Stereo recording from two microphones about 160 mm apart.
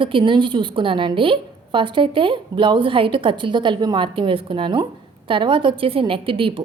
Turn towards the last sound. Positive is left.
turn(degrees=-35)  # may be behind; listen again after turning